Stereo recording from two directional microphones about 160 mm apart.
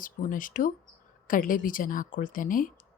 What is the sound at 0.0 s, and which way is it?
A woman's voice, 55° left (ahead or behind).